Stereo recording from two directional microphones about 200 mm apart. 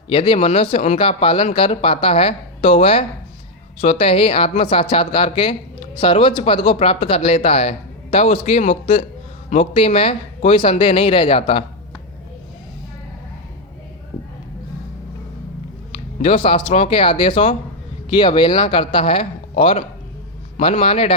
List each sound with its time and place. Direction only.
0.1 s speech: 25° left (ahead or behind)
16.2 s speech: 25° left (ahead or behind)